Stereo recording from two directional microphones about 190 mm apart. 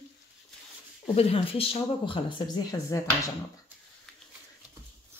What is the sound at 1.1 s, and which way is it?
Speech, 30° left (ahead or behind).